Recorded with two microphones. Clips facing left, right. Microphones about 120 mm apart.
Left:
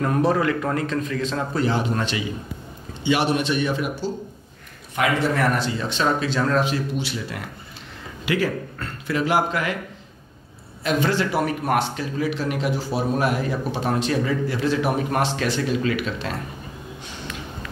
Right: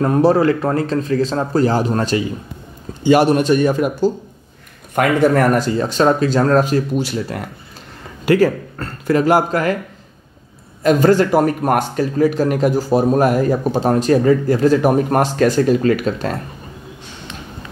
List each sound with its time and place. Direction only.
0.0 s speech: 35° right (ahead or behind)
10.8 s speech: 45° right (ahead or behind)